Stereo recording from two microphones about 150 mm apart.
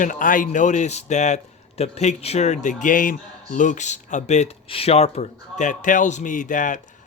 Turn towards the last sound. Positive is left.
turn(degrees=60)  # may be behind; listen again after turning